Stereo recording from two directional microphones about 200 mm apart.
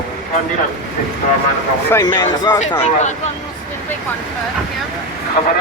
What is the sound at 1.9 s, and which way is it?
Speech, 20° left (ahead or behind).